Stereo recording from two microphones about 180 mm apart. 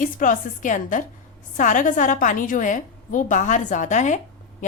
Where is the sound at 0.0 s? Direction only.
45° left (ahead or behind).